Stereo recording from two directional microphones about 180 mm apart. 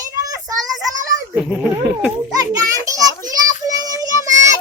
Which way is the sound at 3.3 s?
20° right (ahead or behind).